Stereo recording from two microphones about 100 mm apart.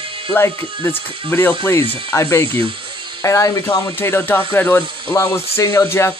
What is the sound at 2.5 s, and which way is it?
Speech, 65° right (ahead or behind).